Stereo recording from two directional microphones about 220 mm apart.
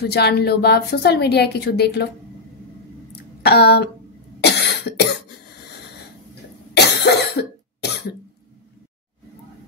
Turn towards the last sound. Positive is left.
turn(degrees=50)  # may be behind; listen again after turning